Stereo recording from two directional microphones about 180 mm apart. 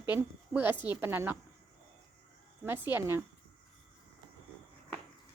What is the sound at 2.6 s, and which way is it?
Speech, 10° right (ahead or behind).